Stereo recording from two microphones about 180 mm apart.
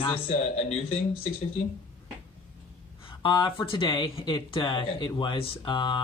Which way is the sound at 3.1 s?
25° left (ahead or behind).